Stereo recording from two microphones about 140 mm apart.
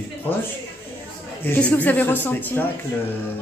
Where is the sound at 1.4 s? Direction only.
15° left (ahead or behind).